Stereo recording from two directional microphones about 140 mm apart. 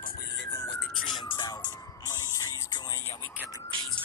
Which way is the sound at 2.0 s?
25° left (ahead or behind).